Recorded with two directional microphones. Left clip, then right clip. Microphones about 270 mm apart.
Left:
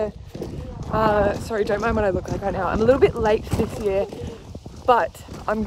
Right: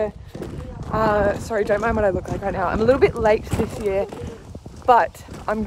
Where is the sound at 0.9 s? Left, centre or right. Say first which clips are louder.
Even; centre.